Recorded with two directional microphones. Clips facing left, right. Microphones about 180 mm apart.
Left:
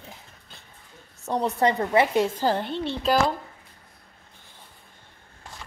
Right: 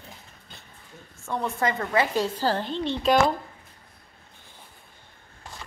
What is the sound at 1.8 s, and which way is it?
A woman's voice, 20° left (ahead or behind).